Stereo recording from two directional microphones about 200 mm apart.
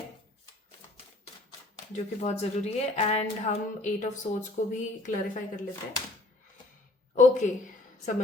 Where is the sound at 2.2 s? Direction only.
30° left (ahead or behind).